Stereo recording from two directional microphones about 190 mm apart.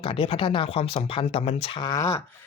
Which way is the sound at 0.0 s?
30° left (ahead or behind).